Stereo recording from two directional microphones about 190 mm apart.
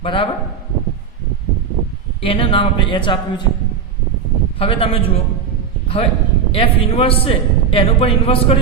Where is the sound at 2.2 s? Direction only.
30° left (ahead or behind).